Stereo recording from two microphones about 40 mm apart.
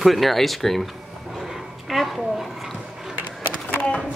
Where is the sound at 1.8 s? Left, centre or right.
Centre.